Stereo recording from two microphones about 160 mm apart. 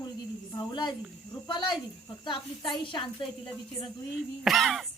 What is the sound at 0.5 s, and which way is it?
Speech, 25° left (ahead or behind).